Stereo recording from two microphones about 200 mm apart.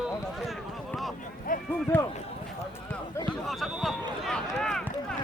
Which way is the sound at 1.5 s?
45° left (ahead or behind).